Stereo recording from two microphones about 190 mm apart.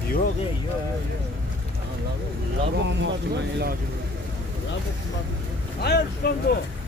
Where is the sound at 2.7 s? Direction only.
70° right (ahead or behind).